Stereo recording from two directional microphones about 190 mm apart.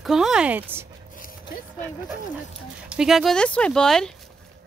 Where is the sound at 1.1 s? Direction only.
45° left (ahead or behind).